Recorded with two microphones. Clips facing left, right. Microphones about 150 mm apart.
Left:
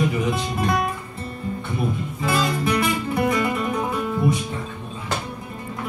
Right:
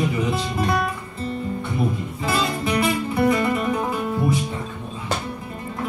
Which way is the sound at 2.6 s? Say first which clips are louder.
Even; 30° right (ahead or behind).